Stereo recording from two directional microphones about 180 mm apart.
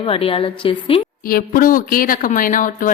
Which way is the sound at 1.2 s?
50° left (ahead or behind).